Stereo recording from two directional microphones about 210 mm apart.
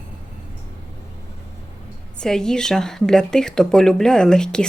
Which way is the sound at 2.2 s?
5° left (ahead or behind).